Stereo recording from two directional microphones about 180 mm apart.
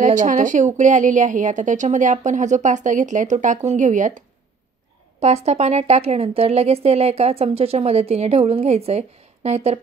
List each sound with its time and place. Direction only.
0.0 s a woman's voice: 45° right (ahead or behind)
5.2 s a woman's voice: 35° right (ahead or behind)